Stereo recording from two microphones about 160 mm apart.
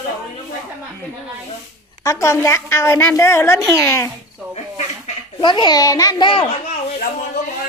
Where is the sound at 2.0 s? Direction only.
20° left (ahead or behind).